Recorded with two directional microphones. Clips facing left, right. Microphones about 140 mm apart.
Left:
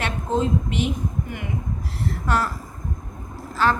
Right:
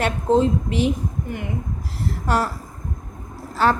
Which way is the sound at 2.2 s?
40° right (ahead or behind).